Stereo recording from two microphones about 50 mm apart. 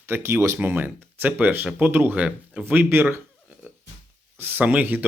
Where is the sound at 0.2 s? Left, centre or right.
Right.